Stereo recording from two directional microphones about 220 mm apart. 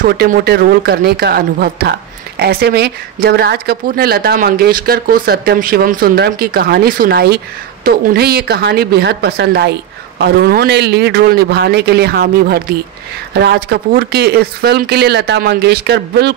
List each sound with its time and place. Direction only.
0.0 s speech: 40° right (ahead or behind)